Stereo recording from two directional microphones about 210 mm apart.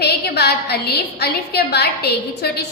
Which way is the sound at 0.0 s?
50° left (ahead or behind).